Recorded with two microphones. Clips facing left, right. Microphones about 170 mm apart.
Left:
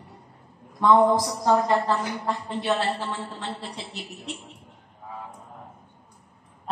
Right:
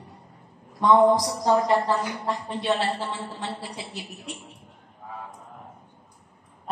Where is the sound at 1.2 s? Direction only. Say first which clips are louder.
Even; 15° right (ahead or behind).